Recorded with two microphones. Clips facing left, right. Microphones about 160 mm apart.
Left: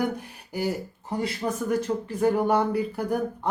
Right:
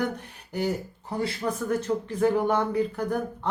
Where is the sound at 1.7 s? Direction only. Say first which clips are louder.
Left 1 dB; 10° left (ahead or behind).